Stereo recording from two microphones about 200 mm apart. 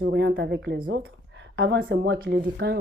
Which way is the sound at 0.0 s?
60° right (ahead or behind).